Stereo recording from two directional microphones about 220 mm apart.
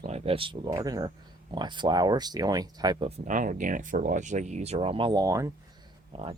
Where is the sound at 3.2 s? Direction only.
35° right (ahead or behind); by 5.5 s 15° right (ahead or behind).